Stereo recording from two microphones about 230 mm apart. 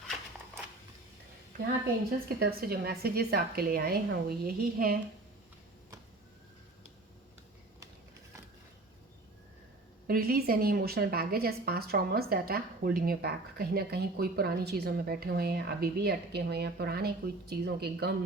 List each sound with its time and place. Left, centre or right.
2.4 s a woman's voice: right
10.1 s a woman's voice: right